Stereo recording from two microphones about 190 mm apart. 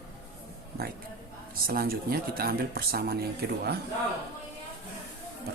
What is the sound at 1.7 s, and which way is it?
Speech, 50° right (ahead or behind).